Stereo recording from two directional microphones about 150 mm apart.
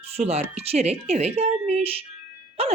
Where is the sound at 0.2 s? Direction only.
45° right (ahead or behind).